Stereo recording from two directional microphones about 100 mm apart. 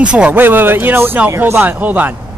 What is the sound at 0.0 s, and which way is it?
Speech, 10° right (ahead or behind).